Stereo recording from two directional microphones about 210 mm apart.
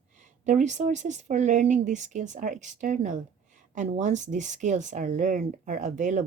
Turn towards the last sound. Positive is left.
turn(degrees=-35)  # may be behind; listen again after turning